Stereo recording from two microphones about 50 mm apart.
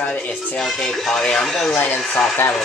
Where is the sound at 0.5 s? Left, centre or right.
Centre.